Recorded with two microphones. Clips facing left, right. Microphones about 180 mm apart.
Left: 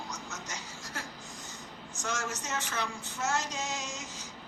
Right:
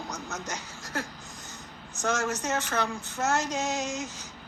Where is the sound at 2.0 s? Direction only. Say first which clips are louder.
Right 8 dB; 60° right (ahead or behind).